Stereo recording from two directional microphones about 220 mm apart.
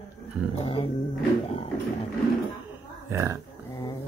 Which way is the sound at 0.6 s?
25° left (ahead or behind).